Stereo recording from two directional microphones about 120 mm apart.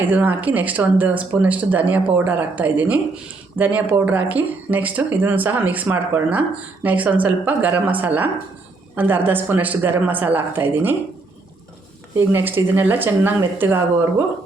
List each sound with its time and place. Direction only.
0.1 s speech: 15° right (ahead or behind)
12.1 s speech: 20° right (ahead or behind)